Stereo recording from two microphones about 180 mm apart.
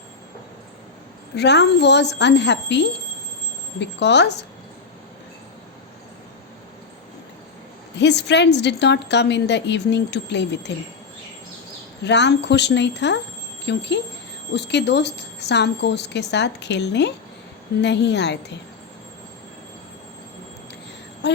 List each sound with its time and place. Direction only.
1.4 s a woman's voice: 70° left (ahead or behind)
7.9 s a woman's voice: 75° left (ahead or behind)
12.0 s a woman's voice: 75° left (ahead or behind)
21.2 s jingle bell: 70° left (ahead or behind)